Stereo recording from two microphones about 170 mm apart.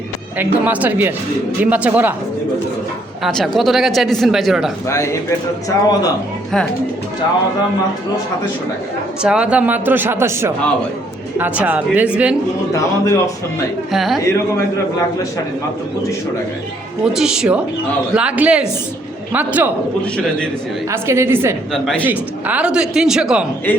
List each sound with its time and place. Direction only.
0.3 s speech: 10° right (ahead or behind)
3.2 s speech: centre (ahead or behind)
5.6 s a man's voice: 20° left (ahead or behind)
9.2 s speech: 5° right (ahead or behind)
12.7 s a man's voice: 20° left (ahead or behind)
13.9 s speech: centre (ahead or behind)
14.2 s a man's voice: 15° left (ahead or behind)
17.1 s speech: 5° right (ahead or behind)
20.9 s speech: 15° right (ahead or behind)
21.7 s speech: centre (ahead or behind)
22.0 s speech: 10° right (ahead or behind)